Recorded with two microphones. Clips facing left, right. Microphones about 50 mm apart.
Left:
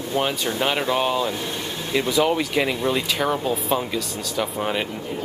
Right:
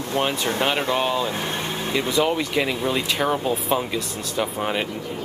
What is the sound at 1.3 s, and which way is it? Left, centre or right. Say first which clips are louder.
Vehicle: right 2 dB; right.